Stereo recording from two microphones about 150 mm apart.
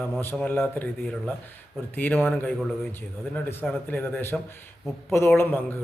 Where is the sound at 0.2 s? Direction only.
15° left (ahead or behind).